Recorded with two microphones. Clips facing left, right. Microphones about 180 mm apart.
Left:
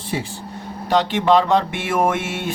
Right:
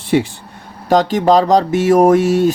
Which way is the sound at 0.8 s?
40° right (ahead or behind).